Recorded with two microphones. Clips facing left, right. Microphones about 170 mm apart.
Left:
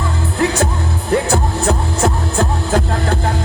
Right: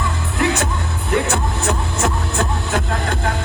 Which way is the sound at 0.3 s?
35° left (ahead or behind).